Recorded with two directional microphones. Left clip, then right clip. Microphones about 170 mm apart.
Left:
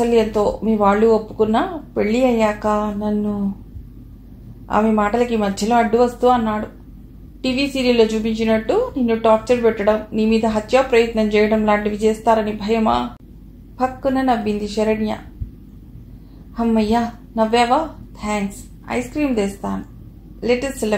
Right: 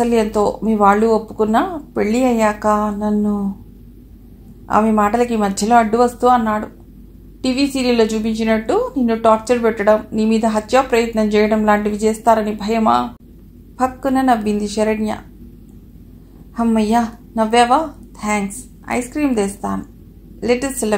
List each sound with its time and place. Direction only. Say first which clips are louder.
0.0 s a woman's voice: even; 40° right (ahead or behind)
4.6 s a woman's voice: right 3 dB; 35° right (ahead or behind)
16.5 s a woman's voice: right 2 dB; 40° right (ahead or behind)